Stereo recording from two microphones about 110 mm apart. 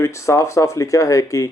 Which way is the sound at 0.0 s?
25° left (ahead or behind).